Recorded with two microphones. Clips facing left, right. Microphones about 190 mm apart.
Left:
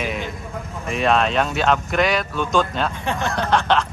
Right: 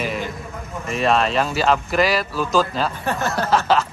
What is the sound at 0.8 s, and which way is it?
Speech, centre (ahead or behind).